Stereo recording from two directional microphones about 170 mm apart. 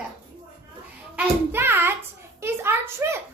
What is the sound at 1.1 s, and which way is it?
Hands, 10° right (ahead or behind).